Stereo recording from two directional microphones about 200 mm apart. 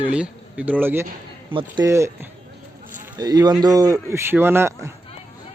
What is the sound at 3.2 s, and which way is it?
Speech, 20° right (ahead or behind).